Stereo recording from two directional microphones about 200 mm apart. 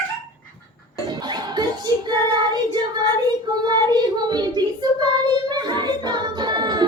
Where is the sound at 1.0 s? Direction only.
20° right (ahead or behind).